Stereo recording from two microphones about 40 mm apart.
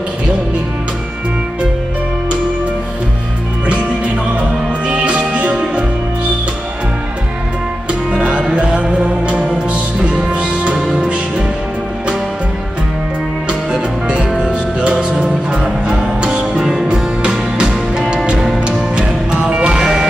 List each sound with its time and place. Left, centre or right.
4.8 s music: right
8.2 s music: right
8.5 s music: right
13.5 s music: right